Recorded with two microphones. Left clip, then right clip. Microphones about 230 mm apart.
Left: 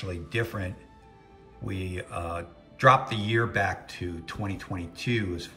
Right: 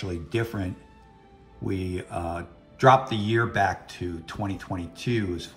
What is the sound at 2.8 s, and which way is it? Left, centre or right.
Speech, centre.